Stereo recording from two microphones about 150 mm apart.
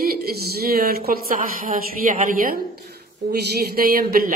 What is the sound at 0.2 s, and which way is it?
Speech, 90° right.